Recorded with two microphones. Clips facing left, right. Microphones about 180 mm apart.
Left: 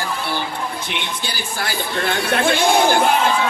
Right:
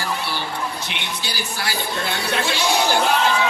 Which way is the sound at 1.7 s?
55° left (ahead or behind).